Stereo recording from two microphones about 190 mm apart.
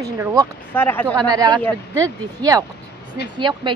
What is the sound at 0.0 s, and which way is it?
Speech, 20° right (ahead or behind).